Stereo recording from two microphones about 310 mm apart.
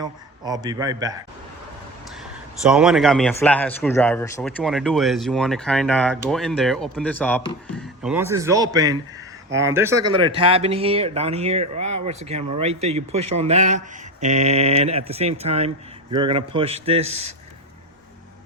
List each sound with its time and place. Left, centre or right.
0.0 s a man's voice: centre
2.6 s a man's voice: centre